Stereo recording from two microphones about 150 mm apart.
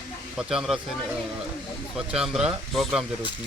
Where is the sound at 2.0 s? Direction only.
5° right (ahead or behind).